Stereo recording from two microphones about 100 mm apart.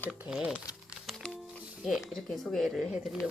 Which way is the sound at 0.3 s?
10° right (ahead or behind).